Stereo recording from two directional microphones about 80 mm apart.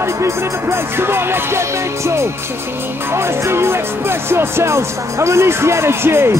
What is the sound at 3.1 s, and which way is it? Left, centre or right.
Speech, right.